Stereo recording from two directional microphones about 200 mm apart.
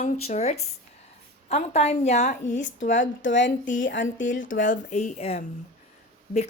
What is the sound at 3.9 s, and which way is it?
Speech, 70° left (ahead or behind).